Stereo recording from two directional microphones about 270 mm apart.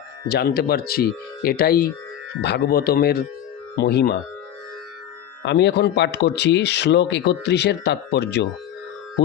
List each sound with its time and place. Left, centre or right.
0.3 s speech: left
5.5 s speech: left